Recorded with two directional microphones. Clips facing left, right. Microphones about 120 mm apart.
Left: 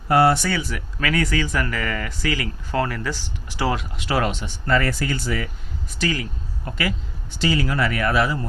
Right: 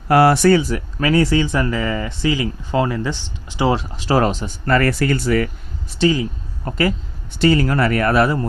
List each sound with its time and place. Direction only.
0.1 s speech: 70° right (ahead or behind)
0.5 s speech: 35° right (ahead or behind)
3.8 s speech: 35° right (ahead or behind)
4.6 s speech: 60° right (ahead or behind)
6.0 s speech: 25° right (ahead or behind)
6.7 s speech: 40° right (ahead or behind)
7.3 s speech: 50° right (ahead or behind)